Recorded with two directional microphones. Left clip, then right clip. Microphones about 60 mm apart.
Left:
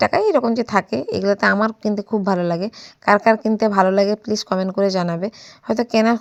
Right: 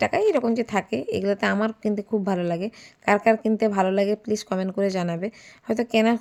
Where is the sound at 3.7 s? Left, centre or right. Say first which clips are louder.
Left 6 dB; left.